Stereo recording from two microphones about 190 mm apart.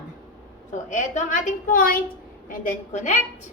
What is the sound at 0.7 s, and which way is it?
A woman's voice, 40° left (ahead or behind).